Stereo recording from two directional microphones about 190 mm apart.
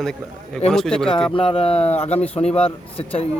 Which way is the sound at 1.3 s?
30° left (ahead or behind).